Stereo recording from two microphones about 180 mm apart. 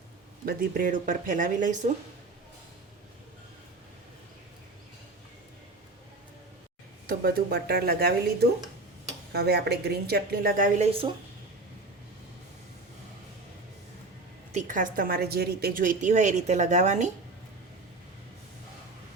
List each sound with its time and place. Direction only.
0.4 s a woman's voice: 50° right (ahead or behind)
7.1 s speech: 60° right (ahead or behind)
10.8 s speech: 30° right (ahead or behind)
14.5 s a woman's voice: 45° right (ahead or behind)